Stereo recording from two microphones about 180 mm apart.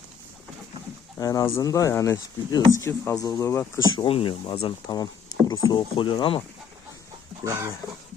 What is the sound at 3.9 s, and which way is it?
Speech, 30° left (ahead or behind).